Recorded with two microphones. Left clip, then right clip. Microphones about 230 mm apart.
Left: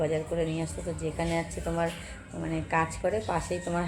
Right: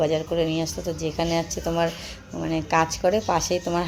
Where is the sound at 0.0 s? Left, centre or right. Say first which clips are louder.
Right 6 dB; right.